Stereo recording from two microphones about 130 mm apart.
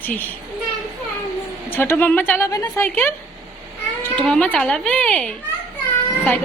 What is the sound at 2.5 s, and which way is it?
Speech, 25° left (ahead or behind).